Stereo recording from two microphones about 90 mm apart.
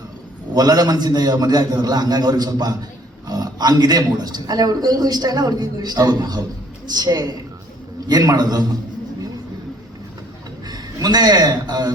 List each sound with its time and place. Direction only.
0.5 s a man's voice: 45° right (ahead or behind)
10.7 s a man's voice: 50° right (ahead or behind)